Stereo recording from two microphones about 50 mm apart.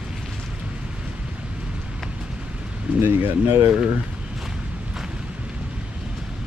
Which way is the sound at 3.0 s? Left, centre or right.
Right.